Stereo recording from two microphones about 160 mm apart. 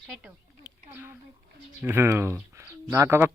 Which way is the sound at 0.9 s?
15° right (ahead or behind).